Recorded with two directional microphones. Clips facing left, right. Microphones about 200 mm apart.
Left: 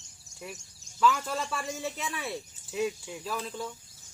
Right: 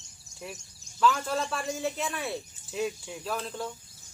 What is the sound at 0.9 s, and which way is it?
Speech, 5° left (ahead or behind).